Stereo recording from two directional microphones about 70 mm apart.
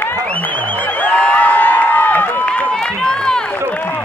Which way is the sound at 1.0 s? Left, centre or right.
Centre.